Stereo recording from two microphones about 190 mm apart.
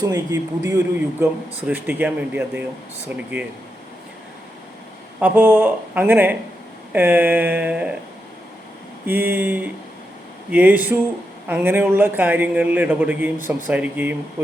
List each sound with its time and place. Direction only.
0.0 s speech: 20° right (ahead or behind)
5.2 s speech: 10° right (ahead or behind)
9.0 s speech: 10° right (ahead or behind)